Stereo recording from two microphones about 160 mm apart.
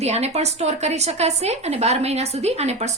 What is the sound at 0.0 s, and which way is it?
A woman's voice, 45° right (ahead or behind).